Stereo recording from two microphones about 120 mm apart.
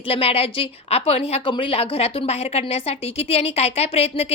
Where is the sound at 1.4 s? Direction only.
45° left (ahead or behind).